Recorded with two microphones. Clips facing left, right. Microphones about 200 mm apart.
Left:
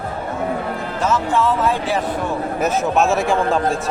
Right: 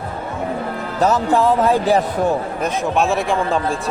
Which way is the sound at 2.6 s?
5° left (ahead or behind).